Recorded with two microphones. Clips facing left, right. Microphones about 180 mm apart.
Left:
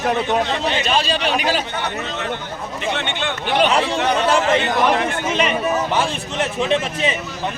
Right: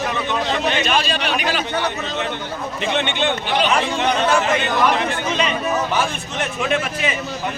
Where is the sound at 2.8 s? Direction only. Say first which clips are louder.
Right 3 dB; 20° right (ahead or behind).